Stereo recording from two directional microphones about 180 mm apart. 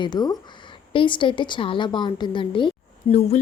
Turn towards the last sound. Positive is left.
turn(degrees=30)  # may be behind; listen again after turning